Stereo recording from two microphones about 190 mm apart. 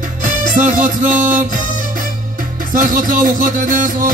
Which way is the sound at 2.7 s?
45° right (ahead or behind).